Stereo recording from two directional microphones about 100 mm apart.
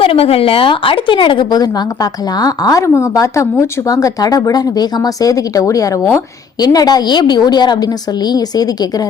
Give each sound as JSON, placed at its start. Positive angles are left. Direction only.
{"t": 0.0, "sound": "speech", "side_deg": 70}